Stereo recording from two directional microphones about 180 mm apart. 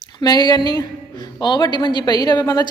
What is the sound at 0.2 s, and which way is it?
A woman's voice, 20° left (ahead or behind).